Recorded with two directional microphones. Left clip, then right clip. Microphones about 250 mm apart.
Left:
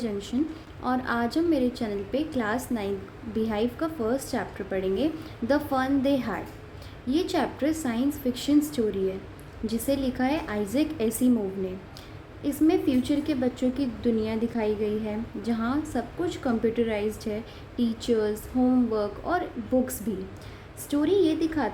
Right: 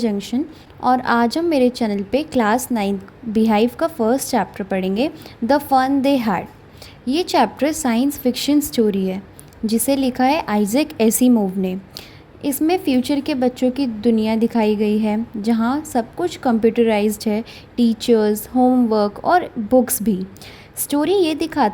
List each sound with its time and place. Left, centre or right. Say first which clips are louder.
0.0 s a woman's voice: right 7 dB; right